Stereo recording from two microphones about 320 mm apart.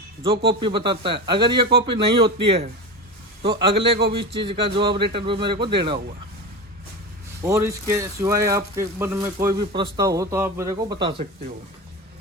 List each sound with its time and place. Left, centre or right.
0.2 s speech: centre
7.4 s speech: centre